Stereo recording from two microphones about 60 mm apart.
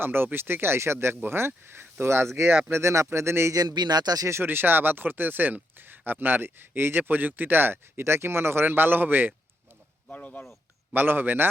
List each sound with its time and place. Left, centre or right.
0.0 s speech: right
3.5 s speech: right
4.3 s speech: right
10.1 s speech: left
10.9 s speech: right